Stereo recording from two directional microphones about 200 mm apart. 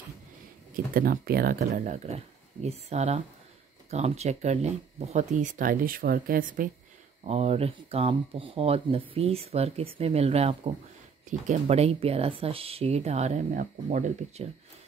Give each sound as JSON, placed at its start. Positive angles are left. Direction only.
{"t": 0.9, "sound": "speech", "side_deg": -45}
{"t": 2.0, "sound": "speech", "side_deg": -30}
{"t": 7.2, "sound": "speech", "side_deg": -30}